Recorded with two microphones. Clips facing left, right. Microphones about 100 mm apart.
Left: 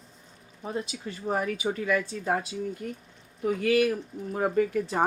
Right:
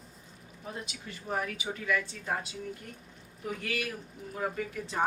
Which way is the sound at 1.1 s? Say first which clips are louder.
Left 6 dB; 40° left (ahead or behind).